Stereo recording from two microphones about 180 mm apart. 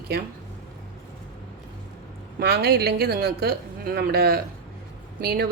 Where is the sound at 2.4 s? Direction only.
65° right (ahead or behind).